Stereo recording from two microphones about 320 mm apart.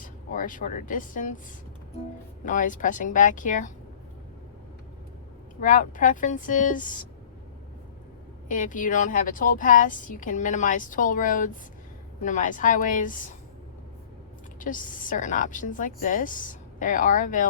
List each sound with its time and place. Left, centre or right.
0.0 s speech: left
2.4 s a woman's voice: left
5.5 s a woman's voice: left
8.4 s a woman's voice: left
14.6 s a woman's voice: left